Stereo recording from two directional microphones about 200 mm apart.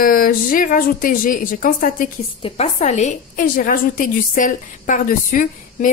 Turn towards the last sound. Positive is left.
turn(degrees=40)  # may be behind; listen again after turning